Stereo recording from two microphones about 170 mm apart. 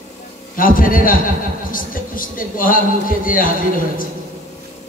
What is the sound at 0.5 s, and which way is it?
A man's voice, 55° left (ahead or behind).